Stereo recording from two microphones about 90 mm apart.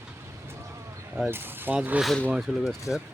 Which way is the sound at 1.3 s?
25° right (ahead or behind).